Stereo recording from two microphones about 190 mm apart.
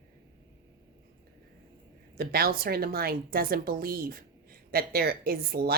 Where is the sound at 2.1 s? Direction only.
55° right (ahead or behind).